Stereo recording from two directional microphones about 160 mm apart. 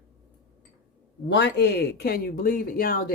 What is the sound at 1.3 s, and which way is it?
Speech, 90° left.